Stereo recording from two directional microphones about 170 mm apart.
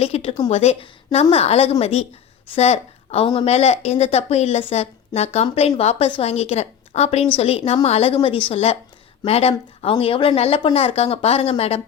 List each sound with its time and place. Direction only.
0.0 s a woman's voice: 35° left (ahead or behind)